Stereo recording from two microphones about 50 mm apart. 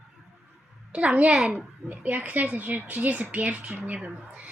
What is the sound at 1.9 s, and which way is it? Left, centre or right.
Speech, right.